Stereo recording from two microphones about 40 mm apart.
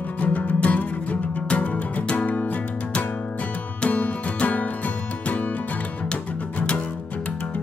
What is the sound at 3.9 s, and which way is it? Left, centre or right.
Music, left.